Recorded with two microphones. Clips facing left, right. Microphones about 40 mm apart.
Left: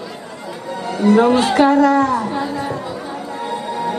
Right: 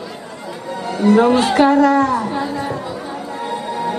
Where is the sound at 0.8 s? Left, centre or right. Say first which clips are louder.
Even; centre.